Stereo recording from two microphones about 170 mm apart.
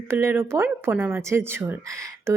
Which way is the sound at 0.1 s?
15° right (ahead or behind).